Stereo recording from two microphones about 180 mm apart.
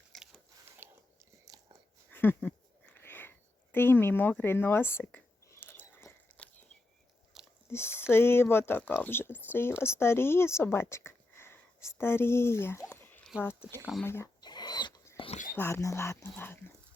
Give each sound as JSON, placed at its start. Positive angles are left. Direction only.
{"t": 0.1, "sound": "biting", "side_deg": 0}
{"t": 0.8, "sound": "chewing", "side_deg": -15}
{"t": 1.5, "sound": "biting", "side_deg": -20}
{"t": 2.0, "sound": "a sound", "side_deg": 10}
{"t": 7.3, "sound": "chewing", "side_deg": 0}
{"t": 7.7, "sound": "a woman's voice", "side_deg": 15}
{"t": 14.0, "sound": "a sound", "side_deg": 15}
{"t": 15.5, "sound": "speech", "side_deg": 15}